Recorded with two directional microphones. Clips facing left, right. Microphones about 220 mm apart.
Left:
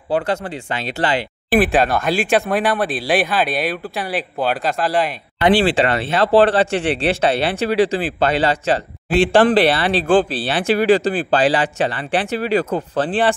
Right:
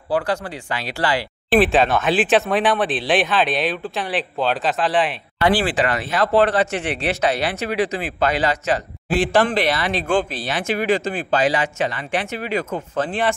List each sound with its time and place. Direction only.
0.1 s speech: 25° left (ahead or behind)
1.5 s speech: centre (ahead or behind)
5.4 s speech: 25° left (ahead or behind)